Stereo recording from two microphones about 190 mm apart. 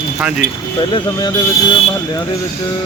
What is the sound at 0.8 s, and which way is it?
Speech, 25° left (ahead or behind).